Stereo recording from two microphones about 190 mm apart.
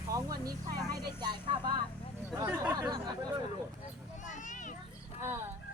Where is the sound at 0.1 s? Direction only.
20° right (ahead or behind).